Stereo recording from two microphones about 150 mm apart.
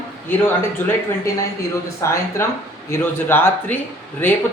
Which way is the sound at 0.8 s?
15° left (ahead or behind).